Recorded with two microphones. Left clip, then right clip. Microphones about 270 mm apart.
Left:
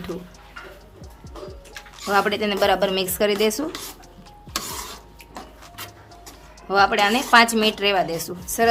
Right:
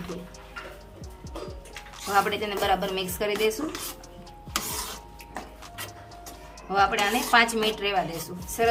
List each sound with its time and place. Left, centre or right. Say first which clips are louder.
2.0 s speech: left 4 dB; left
6.7 s speech: left 5 dB; left